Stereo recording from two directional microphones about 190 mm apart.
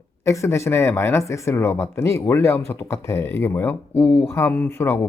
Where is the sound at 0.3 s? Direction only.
15° left (ahead or behind).